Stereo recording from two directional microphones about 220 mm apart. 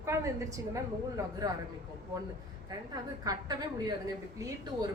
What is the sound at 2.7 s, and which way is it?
A woman's voice, 15° right (ahead or behind).